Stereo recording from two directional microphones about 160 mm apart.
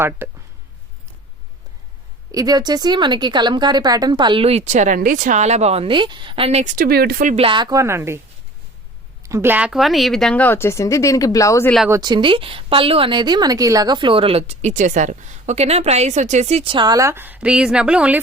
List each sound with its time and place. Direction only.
0.2 s speech: 15° right (ahead or behind)
2.3 s a woman's voice: 25° right (ahead or behind); by 6.7 s 40° right (ahead or behind)
6.7 s speech: 70° right (ahead or behind)
7.3 s a woman's voice: 30° right (ahead or behind); by 8.2 s 15° right (ahead or behind)
9.2 s speech: 15° right (ahead or behind); by 11.7 s 20° left (ahead or behind)
11.9 s a woman's voice: 25° right (ahead or behind); by 18.2 s 5° right (ahead or behind)